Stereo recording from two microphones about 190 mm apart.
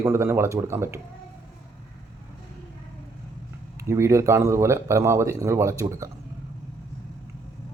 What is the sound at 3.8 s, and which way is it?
Speech, 15° right (ahead or behind).